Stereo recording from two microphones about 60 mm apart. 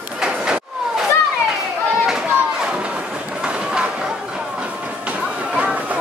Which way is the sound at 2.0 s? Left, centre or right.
Centre.